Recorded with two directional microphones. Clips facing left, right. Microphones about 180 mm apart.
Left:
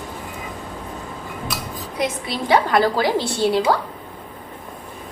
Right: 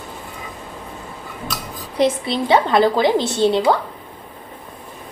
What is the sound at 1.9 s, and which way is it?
A woman's voice, 25° right (ahead or behind).